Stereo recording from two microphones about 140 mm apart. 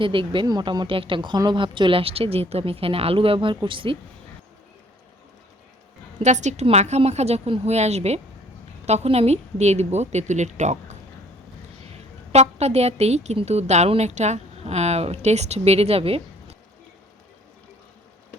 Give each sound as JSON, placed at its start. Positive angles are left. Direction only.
{"t": 0.0, "sound": "speech", "side_deg": -35}
{"t": 6.2, "sound": "a woman's voice", "side_deg": -55}
{"t": 12.3, "sound": "a woman's voice", "side_deg": -50}